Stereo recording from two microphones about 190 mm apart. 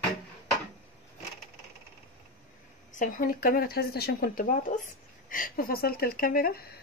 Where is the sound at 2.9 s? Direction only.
45° left (ahead or behind).